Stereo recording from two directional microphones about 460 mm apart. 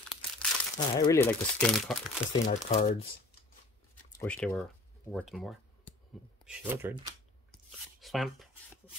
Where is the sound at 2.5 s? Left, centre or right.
Centre.